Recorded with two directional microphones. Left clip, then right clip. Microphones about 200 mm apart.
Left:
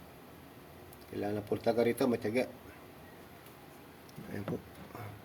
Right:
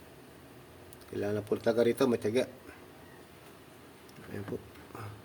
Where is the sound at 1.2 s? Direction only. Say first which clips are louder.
Right 2 dB; 30° right (ahead or behind).